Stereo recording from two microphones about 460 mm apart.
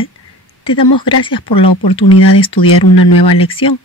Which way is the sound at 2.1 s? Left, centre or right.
Left.